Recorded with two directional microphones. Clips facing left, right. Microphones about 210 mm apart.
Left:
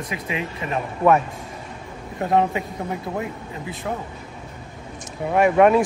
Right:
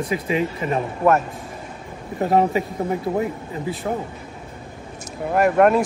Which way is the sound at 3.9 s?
30° right (ahead or behind).